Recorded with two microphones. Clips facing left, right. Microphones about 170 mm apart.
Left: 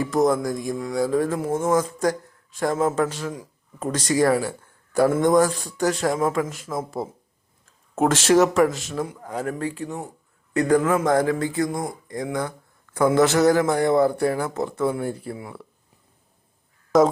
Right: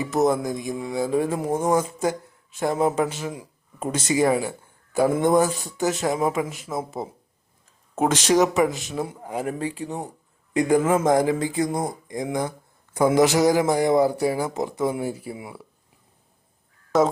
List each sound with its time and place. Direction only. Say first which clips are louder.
0.3 s speech: left 1 dB; 5° right (ahead or behind)
6.1 s speech: left 1 dB; 15° right (ahead or behind)
8.1 s speech: left 2 dB; 5° left (ahead or behind)
9.0 s speech: even; 20° right (ahead or behind)